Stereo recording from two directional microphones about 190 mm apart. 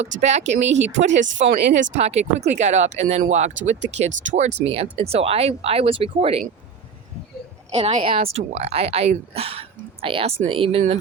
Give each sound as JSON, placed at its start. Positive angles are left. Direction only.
{"t": 0.2, "sound": "speech", "side_deg": -35}
{"t": 1.1, "sound": "speech", "side_deg": -75}
{"t": 1.9, "sound": "speech", "side_deg": -35}
{"t": 7.7, "sound": "speech", "side_deg": -30}